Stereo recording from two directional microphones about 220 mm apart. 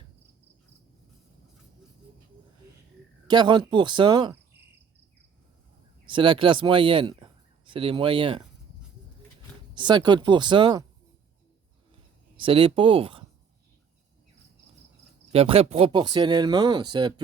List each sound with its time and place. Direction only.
3.2 s speech: 20° right (ahead or behind)
6.1 s a man's voice: 20° right (ahead or behind)
9.7 s speech: 20° right (ahead or behind)
12.4 s speech: 25° right (ahead or behind)
15.3 s speech: 25° right (ahead or behind)